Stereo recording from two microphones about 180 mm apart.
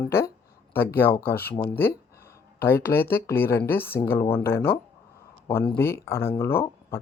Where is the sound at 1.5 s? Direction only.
10° left (ahead or behind).